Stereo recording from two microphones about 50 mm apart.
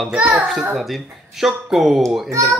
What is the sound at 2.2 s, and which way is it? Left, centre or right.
Speech, right.